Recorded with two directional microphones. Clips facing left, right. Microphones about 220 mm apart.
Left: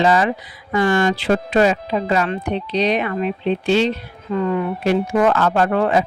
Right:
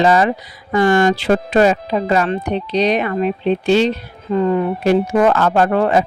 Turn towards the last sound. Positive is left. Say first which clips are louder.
# right 2 dB
turn(degrees=-40)  # may be behind; listen again after turning